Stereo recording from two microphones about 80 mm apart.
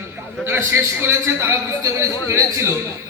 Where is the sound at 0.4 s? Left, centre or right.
Right.